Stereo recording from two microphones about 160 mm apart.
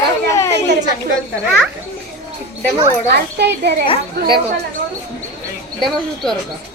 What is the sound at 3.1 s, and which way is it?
Speech, 90° right.